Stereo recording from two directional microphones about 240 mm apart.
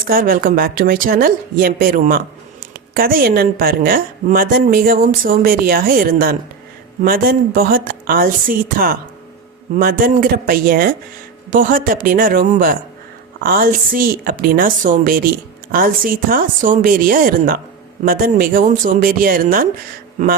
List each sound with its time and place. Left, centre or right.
0.0 s a woman's voice: right